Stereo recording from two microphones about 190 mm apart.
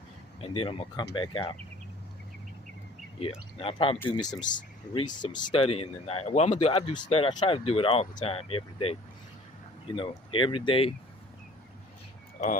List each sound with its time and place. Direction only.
0.4 s speech: 30° left (ahead or behind)
3.6 s speech: 30° left (ahead or behind)